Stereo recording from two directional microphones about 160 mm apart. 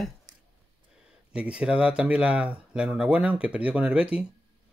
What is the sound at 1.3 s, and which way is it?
Speech, 5° right (ahead or behind).